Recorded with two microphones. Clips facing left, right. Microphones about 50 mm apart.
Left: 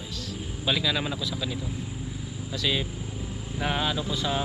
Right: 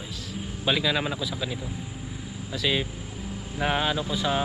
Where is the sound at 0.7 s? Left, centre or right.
Centre.